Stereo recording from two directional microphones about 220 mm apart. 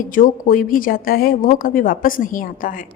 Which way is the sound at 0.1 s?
40° left (ahead or behind).